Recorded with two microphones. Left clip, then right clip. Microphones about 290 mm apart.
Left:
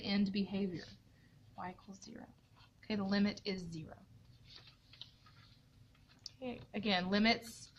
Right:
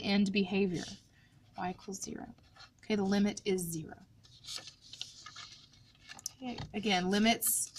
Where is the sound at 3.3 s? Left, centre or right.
Centre.